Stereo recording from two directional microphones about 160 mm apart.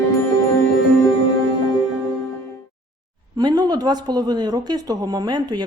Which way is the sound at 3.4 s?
25° right (ahead or behind).